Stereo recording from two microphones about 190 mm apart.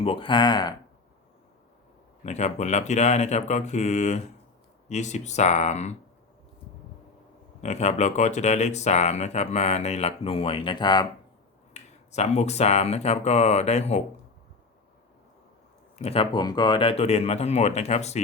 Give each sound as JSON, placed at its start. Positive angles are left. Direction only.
{"t": 0.0, "sound": "speech", "side_deg": 30}
{"t": 2.2, "sound": "speech", "side_deg": 35}
{"t": 7.6, "sound": "speech", "side_deg": 35}
{"t": 11.7, "sound": "speech", "side_deg": 35}
{"t": 16.0, "sound": "speech", "side_deg": 30}